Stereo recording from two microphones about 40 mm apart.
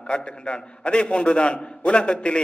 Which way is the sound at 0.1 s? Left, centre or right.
Left.